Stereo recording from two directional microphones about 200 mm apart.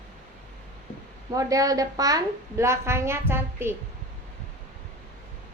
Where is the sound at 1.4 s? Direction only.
15° right (ahead or behind).